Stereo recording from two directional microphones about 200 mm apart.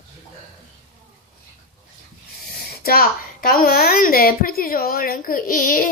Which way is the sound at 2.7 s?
50° left (ahead or behind).